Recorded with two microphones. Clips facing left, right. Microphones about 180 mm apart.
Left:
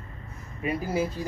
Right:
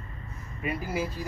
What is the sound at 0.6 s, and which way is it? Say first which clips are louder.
Speech: left 4 dB; 25° left (ahead or behind).